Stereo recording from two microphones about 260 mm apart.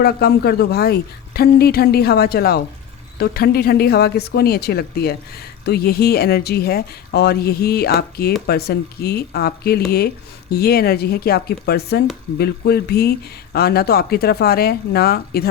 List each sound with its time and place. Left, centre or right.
0.0 s speech: left